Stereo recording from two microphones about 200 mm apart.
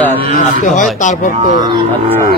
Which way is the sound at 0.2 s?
40° left (ahead or behind).